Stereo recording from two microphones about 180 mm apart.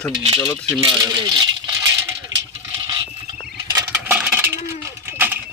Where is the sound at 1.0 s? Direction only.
20° right (ahead or behind).